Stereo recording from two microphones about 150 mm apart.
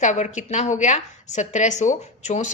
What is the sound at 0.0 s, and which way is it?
A woman's voice, 55° left (ahead or behind).